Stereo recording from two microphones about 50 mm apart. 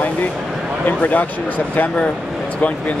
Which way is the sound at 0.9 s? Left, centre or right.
Left.